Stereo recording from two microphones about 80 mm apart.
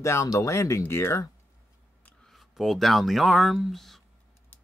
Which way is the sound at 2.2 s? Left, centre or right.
Centre.